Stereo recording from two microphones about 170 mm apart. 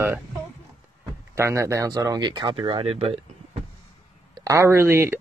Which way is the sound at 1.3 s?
15° right (ahead or behind).